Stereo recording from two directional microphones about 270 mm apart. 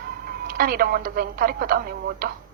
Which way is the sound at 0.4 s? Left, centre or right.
Right.